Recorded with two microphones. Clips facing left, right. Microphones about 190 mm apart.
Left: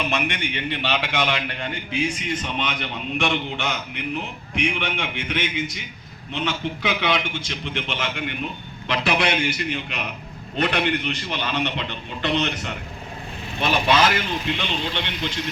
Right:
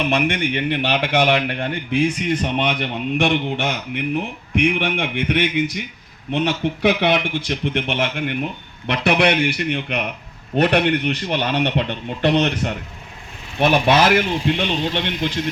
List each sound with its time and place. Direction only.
0.1 s a man's voice: 55° right (ahead or behind)
6.8 s a man's voice: 60° right (ahead or behind)